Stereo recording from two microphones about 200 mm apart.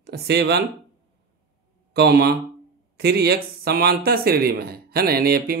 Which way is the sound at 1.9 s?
55° right (ahead or behind).